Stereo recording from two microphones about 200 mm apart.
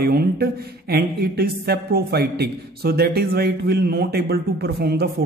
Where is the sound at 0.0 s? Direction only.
50° right (ahead or behind).